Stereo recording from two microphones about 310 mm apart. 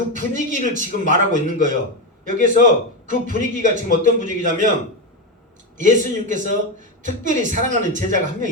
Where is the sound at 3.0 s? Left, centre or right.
Right.